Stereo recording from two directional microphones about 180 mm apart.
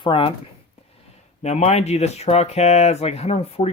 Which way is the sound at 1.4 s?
40° left (ahead or behind).